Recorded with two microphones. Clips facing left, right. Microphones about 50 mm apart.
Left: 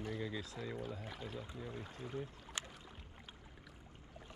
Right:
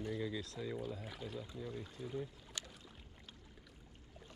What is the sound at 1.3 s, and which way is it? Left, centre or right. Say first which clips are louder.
Speech: right 1 dB; left.